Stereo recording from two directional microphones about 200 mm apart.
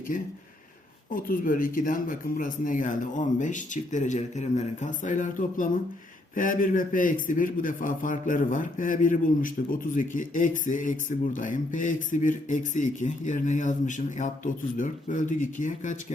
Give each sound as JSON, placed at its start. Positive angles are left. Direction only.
{"t": 1.1, "sound": "a man's voice", "side_deg": 45}